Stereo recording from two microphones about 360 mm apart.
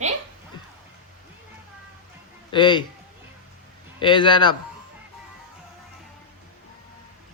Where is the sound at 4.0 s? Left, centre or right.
Centre.